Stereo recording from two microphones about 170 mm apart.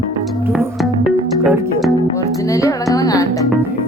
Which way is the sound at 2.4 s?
20° left (ahead or behind).